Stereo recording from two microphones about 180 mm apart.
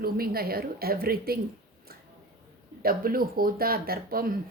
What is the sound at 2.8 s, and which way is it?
A woman's voice, 55° right (ahead or behind).